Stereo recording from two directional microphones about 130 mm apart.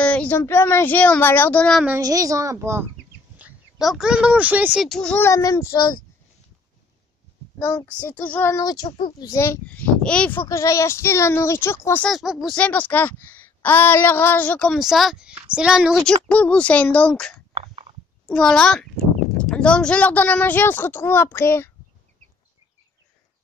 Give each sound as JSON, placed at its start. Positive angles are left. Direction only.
{"t": 0.0, "sound": "a woman's voice", "side_deg": 10}
{"t": 2.0, "sound": "a child's voice", "side_deg": -25}
{"t": 3.3, "sound": "speech", "side_deg": -5}
{"t": 4.8, "sound": "a child's voice", "side_deg": 5}
{"t": 5.2, "sound": "speech", "side_deg": 25}
{"t": 7.5, "sound": "a woman's voice", "side_deg": 15}
{"t": 8.8, "sound": "a child's voice", "side_deg": 40}
{"t": 9.2, "sound": "speech", "side_deg": 25}
{"t": 9.7, "sound": "speech", "side_deg": 10}
{"t": 12.0, "sound": "a child's voice", "side_deg": 0}
{"t": 12.5, "sound": "a woman's voice", "side_deg": 10}
{"t": 16.3, "sound": "a woman's voice", "side_deg": 10}